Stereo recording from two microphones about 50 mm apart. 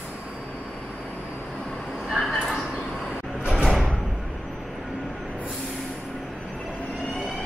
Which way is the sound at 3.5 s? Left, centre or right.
Centre.